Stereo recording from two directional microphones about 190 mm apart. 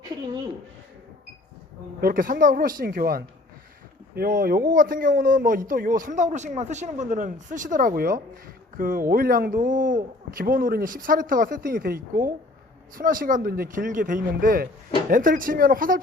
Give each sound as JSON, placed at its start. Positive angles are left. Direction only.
{"t": 2.0, "sound": "a man's voice", "side_deg": -50}